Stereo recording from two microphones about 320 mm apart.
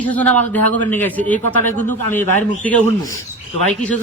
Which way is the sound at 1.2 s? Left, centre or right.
Left.